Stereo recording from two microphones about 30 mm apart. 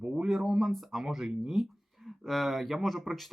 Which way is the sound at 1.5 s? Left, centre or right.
Centre.